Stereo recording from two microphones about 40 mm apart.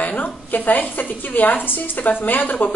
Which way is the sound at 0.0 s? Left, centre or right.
Left.